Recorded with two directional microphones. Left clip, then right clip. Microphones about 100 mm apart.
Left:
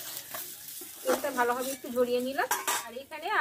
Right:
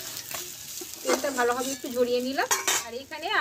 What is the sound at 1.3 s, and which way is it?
Speech, 40° right (ahead or behind).